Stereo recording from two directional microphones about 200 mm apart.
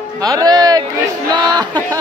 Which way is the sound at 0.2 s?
20° right (ahead or behind).